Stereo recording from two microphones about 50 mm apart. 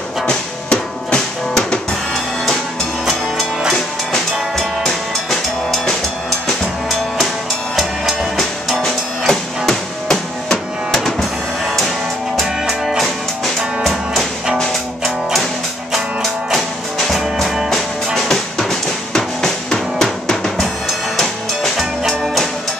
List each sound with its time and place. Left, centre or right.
0.3 s music: centre
3.7 s drum: centre
7.7 s music: centre
12.4 s music: centre
17.1 s music: centre
17.6 s drum: centre
21.7 s music: centre